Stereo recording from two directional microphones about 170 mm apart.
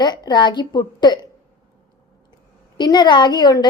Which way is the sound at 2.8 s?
25° left (ahead or behind).